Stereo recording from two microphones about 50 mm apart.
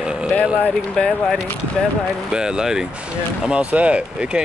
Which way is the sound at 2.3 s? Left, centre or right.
Centre.